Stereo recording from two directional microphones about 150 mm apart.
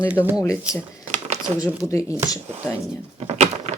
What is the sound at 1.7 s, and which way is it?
Speech, 20° left (ahead or behind).